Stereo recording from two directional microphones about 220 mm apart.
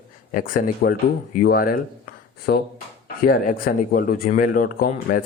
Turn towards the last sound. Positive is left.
turn(degrees=40)  # may be behind; listen again after turning